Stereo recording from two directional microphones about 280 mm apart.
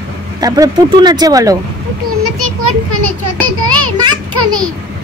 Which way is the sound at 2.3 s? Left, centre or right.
Right.